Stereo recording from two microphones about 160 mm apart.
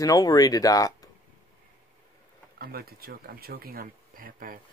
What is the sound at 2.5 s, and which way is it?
Speech, 70° right (ahead or behind).